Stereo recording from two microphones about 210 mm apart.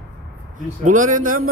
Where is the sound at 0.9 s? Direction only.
40° right (ahead or behind).